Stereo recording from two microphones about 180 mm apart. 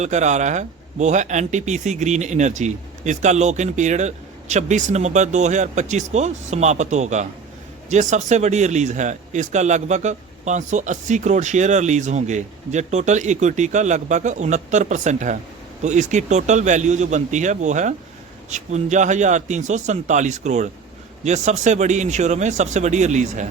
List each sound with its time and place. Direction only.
0.0 s speech: 40° right (ahead or behind)